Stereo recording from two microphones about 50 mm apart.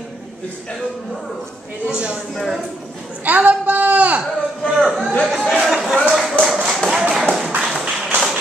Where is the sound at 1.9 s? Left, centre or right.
Right.